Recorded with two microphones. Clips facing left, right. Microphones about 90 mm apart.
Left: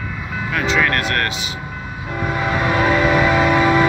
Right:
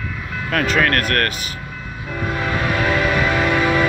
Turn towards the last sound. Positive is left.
turn(degrees=15)  # may be behind; listen again after turning